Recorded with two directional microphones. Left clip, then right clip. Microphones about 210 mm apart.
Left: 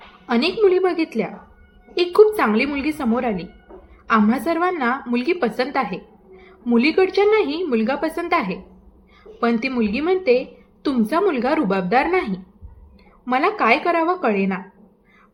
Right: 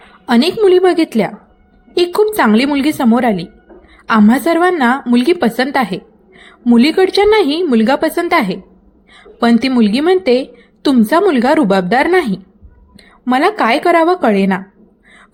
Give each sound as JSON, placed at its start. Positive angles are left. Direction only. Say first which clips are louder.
{"t": 0.3, "sound": "a woman's voice", "louder": "right 6 dB", "side_deg": -40}